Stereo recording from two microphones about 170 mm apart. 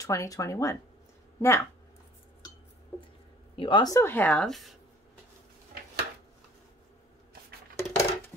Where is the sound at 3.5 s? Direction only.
30° left (ahead or behind); by 4.7 s centre (ahead or behind).